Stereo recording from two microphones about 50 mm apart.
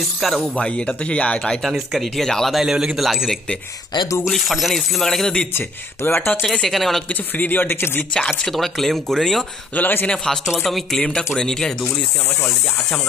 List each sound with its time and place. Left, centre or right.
0.6 s speech: left
2.0 s speech: centre
2.5 s speech: centre
4.3 s speech: centre
6.0 s speech: left
6.4 s speech: centre
7.3 s speech: left
8.1 s speech: centre
8.5 s speech: centre
9.8 s speech: left
10.6 s speech: centre